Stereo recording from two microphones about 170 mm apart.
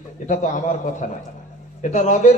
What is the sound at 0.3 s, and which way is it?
A man's voice, 45° left (ahead or behind).